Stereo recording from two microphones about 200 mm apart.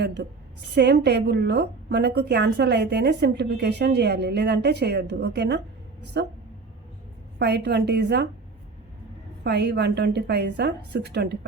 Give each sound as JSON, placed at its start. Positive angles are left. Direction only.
{"t": 0.0, "sound": "a woman's voice", "side_deg": -60}
{"t": 7.3, "sound": "a woman's voice", "side_deg": -55}
{"t": 9.4, "sound": "a woman's voice", "side_deg": -55}